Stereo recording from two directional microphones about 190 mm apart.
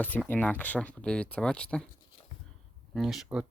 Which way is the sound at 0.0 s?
10° left (ahead or behind).